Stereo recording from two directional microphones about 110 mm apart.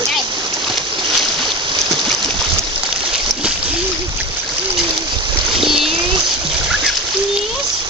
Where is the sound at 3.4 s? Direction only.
10° right (ahead or behind).